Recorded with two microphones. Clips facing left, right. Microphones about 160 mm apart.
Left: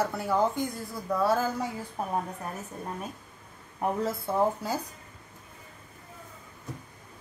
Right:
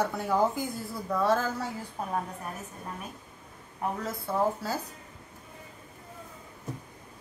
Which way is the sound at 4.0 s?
30° left (ahead or behind).